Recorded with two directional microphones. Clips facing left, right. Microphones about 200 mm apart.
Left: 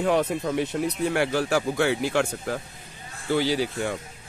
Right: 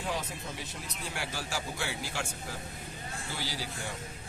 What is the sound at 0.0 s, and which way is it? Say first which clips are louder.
Speech: left 13 dB; 60° left (ahead or behind).